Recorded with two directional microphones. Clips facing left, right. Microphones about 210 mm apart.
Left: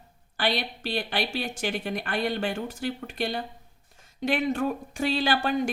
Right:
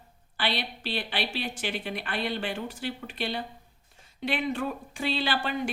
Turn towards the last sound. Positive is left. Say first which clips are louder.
# left 4 dB
turn(degrees=45)  # may be behind; listen again after turning